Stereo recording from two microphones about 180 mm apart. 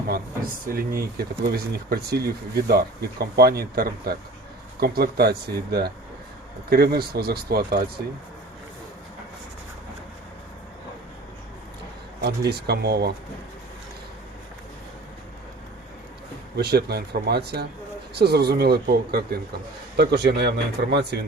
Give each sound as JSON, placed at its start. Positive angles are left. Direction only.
{"t": 0.7, "sound": "speech", "side_deg": -55}
{"t": 12.2, "sound": "speech", "side_deg": -65}
{"t": 16.6, "sound": "speech", "side_deg": -65}